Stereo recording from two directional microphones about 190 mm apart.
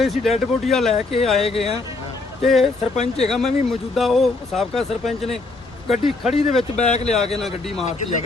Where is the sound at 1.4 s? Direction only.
30° left (ahead or behind).